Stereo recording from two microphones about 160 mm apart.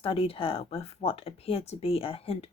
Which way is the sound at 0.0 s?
35° left (ahead or behind).